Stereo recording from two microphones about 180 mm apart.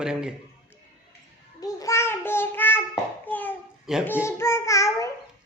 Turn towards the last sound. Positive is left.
turn(degrees=15)  # may be behind; listen again after turning